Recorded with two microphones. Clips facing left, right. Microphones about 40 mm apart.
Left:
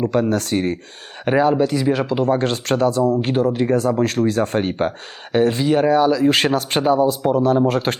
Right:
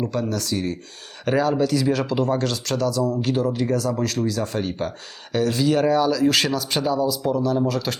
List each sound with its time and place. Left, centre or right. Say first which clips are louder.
0.1 s speech: left 6 dB; left
1.2 s speech: left 4 dB; left
6.4 s speech: left 5 dB; left